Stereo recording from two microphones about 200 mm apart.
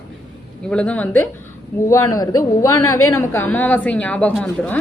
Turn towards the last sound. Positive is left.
turn(degrees=5)  # may be behind; listen again after turning